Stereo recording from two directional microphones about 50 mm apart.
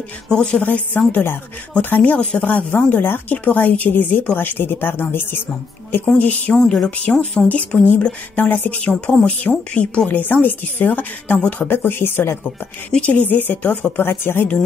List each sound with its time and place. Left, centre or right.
0.3 s speech: centre
0.6 s speech: left
6.1 s speech: left
6.5 s speech: centre
7.4 s speech: left
11.3 s speech: left
11.6 s speech: left
13.0 s speech: left
14.0 s speech: left